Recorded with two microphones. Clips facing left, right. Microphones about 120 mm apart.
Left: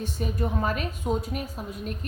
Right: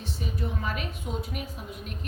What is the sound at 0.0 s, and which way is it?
A woman's voice, 45° left (ahead or behind).